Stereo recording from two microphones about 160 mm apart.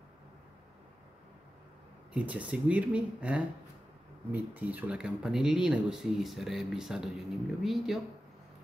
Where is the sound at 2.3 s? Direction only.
10° right (ahead or behind).